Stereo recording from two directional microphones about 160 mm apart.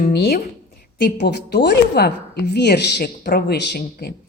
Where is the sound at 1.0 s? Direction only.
90° left.